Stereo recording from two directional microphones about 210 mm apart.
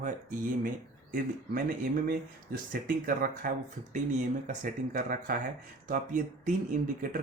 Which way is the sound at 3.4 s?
40° right (ahead or behind).